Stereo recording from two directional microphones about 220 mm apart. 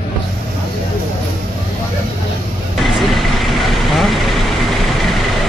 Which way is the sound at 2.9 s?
Centre (ahead or behind).